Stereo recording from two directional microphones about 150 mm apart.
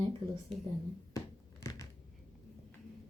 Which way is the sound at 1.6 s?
20° left (ahead or behind).